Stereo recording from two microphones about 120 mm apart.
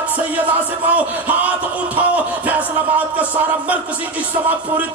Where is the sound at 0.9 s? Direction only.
10° right (ahead or behind).